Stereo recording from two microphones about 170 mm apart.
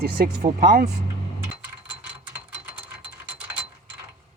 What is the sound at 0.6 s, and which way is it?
Speech, 55° right (ahead or behind).